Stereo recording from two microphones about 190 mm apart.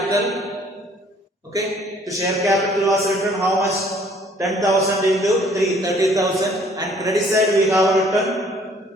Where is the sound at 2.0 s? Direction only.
15° right (ahead or behind).